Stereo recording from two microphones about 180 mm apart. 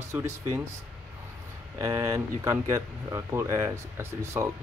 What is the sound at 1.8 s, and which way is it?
Speech, 20° right (ahead or behind).